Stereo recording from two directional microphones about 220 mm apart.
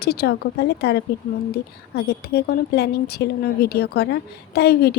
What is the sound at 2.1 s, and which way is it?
A woman's voice, 45° left (ahead or behind).